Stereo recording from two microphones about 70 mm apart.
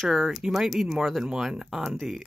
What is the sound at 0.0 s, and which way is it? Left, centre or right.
Speech, centre.